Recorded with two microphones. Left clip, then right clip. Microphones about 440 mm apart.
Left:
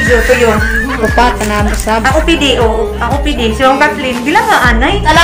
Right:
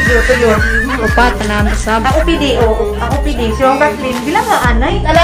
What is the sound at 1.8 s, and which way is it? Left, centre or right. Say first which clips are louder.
Speech: left 2 dB; right.